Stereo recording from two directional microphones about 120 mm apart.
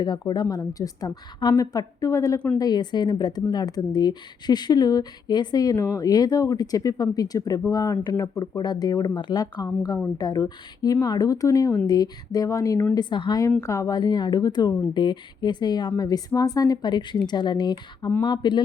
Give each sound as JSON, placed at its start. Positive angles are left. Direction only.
{"t": 0.0, "sound": "speech", "side_deg": 35}